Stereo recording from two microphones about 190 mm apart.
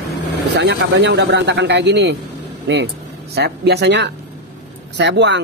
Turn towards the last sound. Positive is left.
turn(degrees=-65)  # may be behind; listen again after turning